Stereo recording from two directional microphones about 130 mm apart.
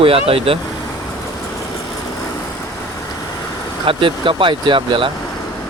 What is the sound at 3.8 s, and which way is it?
Speech, 40° right (ahead or behind).